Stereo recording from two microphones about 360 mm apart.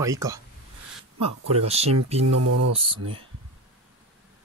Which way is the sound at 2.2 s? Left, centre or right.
Right.